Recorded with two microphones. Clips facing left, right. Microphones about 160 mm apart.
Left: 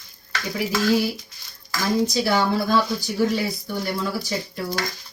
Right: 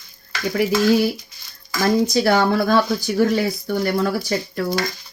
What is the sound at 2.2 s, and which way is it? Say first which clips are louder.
Speech: right 4 dB; 55° right (ahead or behind).